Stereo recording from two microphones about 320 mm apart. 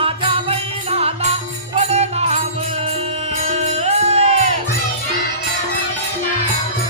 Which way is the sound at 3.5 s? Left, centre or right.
Centre.